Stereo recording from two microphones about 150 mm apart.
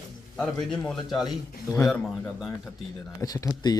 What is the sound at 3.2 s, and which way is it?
Speech, 25° left (ahead or behind).